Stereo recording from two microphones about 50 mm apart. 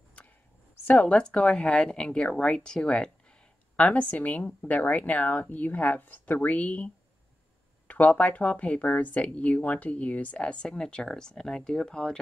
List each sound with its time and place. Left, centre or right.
0.8 s speech: left
1.1 s speech: centre
3.9 s speech: left
8.2 s speech: left; by 12.2 s centre